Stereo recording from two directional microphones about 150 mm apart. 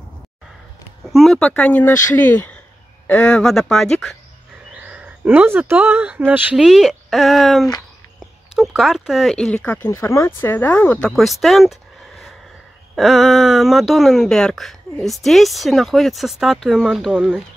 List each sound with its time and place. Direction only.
1.1 s speech: centre (ahead or behind)
4.7 s speech: 10° right (ahead or behind)